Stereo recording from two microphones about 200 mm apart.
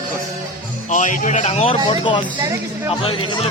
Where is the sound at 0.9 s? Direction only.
40° left (ahead or behind).